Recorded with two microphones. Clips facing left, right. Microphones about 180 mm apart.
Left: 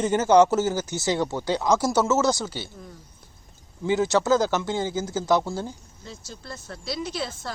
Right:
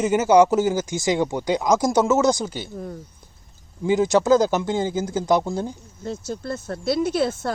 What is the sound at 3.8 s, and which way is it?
Speech, 15° right (ahead or behind).